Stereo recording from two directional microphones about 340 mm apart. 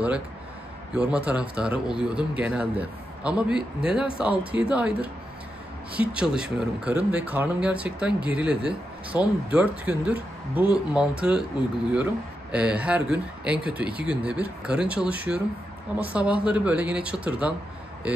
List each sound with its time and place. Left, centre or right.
0.9 s speech: centre
5.9 s speech: centre